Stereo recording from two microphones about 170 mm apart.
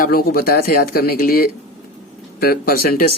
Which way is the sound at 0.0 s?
60° left (ahead or behind).